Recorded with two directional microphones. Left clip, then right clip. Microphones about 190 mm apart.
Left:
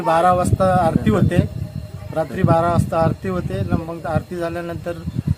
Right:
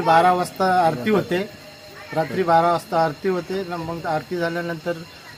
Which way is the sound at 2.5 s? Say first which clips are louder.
Even; 30° left (ahead or behind).